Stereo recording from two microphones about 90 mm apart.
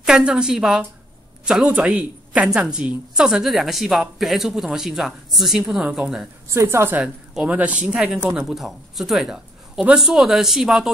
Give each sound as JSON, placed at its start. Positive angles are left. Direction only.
{"t": 0.0, "sound": "a woman's voice", "side_deg": -10}
{"t": 1.7, "sound": "a woman's voice", "side_deg": -15}
{"t": 6.5, "sound": "a woman's voice", "side_deg": -30}
{"t": 7.3, "sound": "a woman's voice", "side_deg": -15}